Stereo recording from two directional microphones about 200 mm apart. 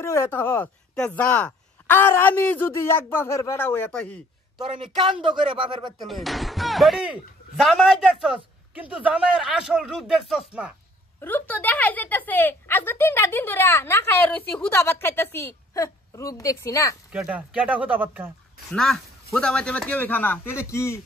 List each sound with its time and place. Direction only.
0.0 s speech: 15° left (ahead or behind)
4.9 s speech: 25° right (ahead or behind)
5.9 s speech: centre (ahead or behind)
11.1 s speech: 10° left (ahead or behind)
17.1 s speech: 5° right (ahead or behind)
18.7 s speech: 5° left (ahead or behind)